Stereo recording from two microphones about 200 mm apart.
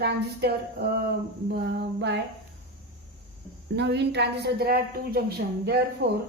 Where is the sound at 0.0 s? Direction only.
55° right (ahead or behind).